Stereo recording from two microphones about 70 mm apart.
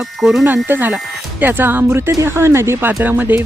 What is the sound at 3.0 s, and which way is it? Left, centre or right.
Speech, right.